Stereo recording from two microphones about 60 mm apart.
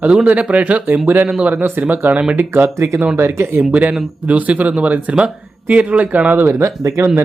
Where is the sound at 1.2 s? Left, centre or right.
Centre.